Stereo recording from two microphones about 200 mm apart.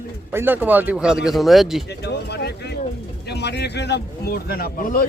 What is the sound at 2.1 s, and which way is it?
Speech, 55° left (ahead or behind).